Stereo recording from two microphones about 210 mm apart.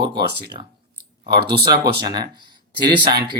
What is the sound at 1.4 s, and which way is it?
Speech, 50° right (ahead or behind).